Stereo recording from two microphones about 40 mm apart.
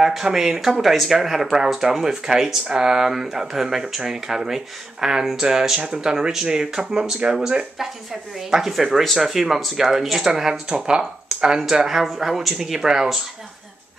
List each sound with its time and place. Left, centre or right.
0.0 s speech: centre
8.4 s speech: centre